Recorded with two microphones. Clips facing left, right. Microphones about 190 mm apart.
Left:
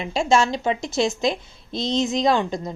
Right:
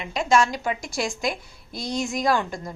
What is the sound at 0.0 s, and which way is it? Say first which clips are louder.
A woman's voice: left 2 dB; 30° left (ahead or behind).